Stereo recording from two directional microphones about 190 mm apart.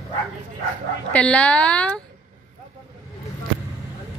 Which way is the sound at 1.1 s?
5° left (ahead or behind).